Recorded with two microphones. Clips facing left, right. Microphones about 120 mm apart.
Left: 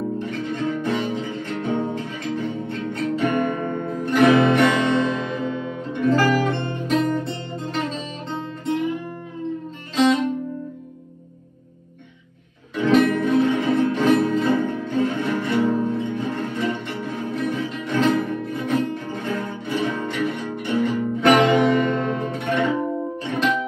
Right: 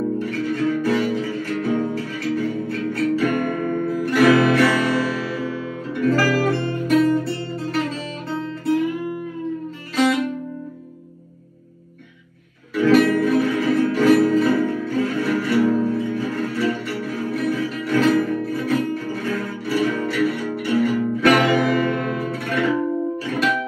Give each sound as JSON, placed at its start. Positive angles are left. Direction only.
{"t": 0.2, "sound": "music", "side_deg": 20}
{"t": 12.7, "sound": "music", "side_deg": 20}